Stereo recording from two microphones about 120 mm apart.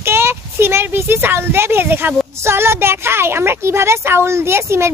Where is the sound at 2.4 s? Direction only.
20° right (ahead or behind).